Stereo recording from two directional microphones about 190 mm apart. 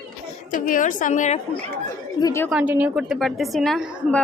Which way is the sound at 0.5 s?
45° left (ahead or behind).